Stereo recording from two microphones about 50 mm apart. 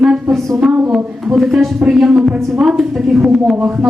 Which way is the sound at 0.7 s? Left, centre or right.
Centre.